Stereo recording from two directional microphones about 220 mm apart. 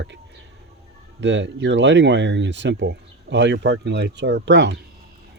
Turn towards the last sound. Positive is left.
turn(degrees=-55)  # may be behind; listen again after turning